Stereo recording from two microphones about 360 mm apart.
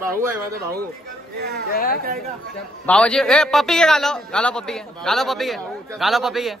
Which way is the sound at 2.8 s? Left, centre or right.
Centre.